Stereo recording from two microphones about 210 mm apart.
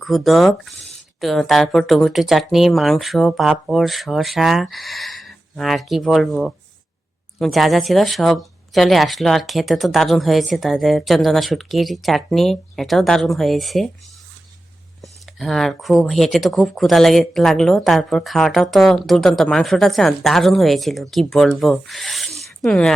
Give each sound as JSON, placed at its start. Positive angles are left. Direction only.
{"t": 0.0, "sound": "speech", "side_deg": 0}
{"t": 15.0, "sound": "speech", "side_deg": 0}
{"t": 22.4, "sound": "a sound", "side_deg": 0}